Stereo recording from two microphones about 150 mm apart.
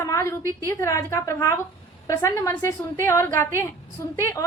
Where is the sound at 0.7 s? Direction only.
20° left (ahead or behind).